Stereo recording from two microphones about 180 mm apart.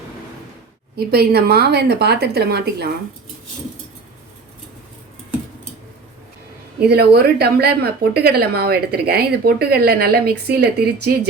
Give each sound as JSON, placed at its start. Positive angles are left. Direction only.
{"t": 0.9, "sound": "a woman's voice", "side_deg": -60}
{"t": 6.7, "sound": "a woman's voice", "side_deg": -65}